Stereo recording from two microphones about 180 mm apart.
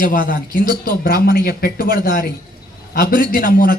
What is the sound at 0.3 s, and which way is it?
A man's voice, 50° left (ahead or behind).